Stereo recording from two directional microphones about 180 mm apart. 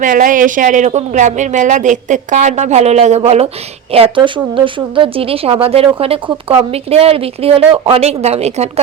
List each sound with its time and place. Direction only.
0.0 s speech: 45° right (ahead or behind)